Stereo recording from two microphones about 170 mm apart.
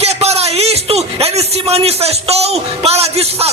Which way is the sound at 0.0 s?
40° right (ahead or behind).